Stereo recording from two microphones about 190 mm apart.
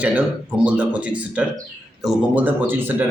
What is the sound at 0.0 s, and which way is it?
Speech, 5° right (ahead or behind).